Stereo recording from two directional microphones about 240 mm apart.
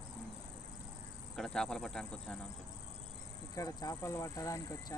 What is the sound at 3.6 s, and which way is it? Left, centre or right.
Speech, centre.